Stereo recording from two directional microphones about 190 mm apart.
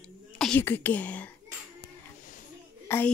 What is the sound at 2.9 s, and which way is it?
Speech, 10° left (ahead or behind).